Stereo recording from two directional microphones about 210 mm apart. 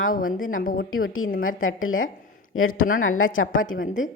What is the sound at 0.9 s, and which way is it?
A woman's voice, 75° left (ahead or behind).